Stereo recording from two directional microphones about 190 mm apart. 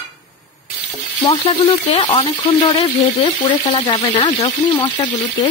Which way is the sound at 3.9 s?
25° left (ahead or behind).